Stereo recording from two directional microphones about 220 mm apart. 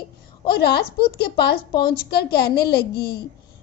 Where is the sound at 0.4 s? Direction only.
45° left (ahead or behind).